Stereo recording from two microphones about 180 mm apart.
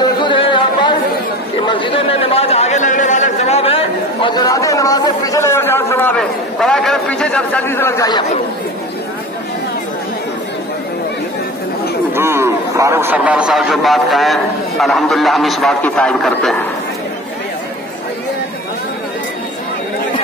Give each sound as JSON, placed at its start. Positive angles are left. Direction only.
{"t": 0.2, "sound": "a sound", "side_deg": 25}
{"t": 1.7, "sound": "speech", "side_deg": 25}
{"t": 12.2, "sound": "a man's voice", "side_deg": -15}